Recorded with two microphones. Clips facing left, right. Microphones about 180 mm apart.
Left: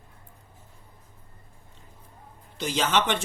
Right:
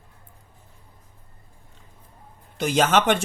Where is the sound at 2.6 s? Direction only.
55° right (ahead or behind).